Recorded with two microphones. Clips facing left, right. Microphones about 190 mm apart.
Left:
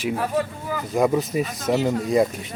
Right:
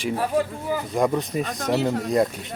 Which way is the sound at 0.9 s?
5° left (ahead or behind).